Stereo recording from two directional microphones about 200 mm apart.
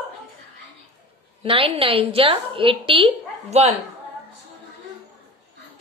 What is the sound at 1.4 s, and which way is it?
A woman's voice, 25° right (ahead or behind).